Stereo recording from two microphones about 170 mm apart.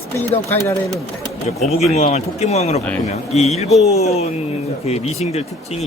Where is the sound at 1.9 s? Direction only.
40° left (ahead or behind).